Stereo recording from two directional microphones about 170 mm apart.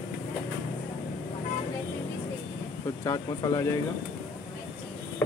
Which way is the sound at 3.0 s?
20° left (ahead or behind).